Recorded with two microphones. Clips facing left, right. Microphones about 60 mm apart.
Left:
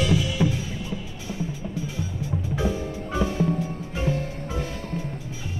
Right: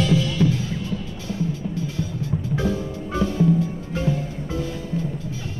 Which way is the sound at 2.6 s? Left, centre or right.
Centre.